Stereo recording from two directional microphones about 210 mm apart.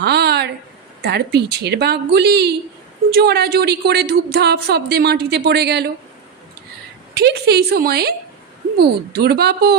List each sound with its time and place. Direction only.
0.0 s a sound: 50° right (ahead or behind)
1.0 s speech: 50° right (ahead or behind)
7.1 s speech: 50° right (ahead or behind)